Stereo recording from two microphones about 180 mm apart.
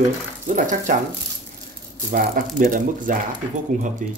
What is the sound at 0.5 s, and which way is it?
Speech, 45° right (ahead or behind).